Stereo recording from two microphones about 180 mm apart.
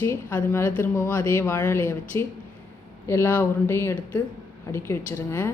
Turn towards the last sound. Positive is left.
turn(degrees=15)  # may be behind; listen again after turning